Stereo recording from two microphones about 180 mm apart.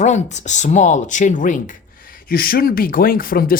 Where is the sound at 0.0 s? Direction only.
40° left (ahead or behind).